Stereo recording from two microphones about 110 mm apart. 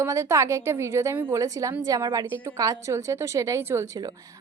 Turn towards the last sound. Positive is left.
turn(degrees=-25)  # may be behind; listen again after turning